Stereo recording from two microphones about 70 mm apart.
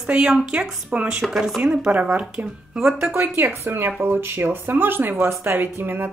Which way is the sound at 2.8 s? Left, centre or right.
Centre.